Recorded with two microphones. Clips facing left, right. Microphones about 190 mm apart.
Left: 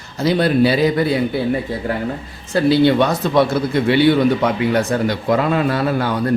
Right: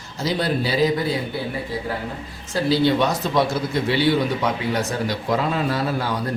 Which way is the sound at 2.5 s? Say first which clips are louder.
Left 5 dB; 60° left (ahead or behind).